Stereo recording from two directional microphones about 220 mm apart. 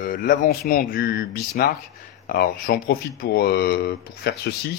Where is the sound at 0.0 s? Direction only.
40° left (ahead or behind).